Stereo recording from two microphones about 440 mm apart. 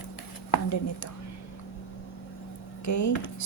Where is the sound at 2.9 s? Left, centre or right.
Left.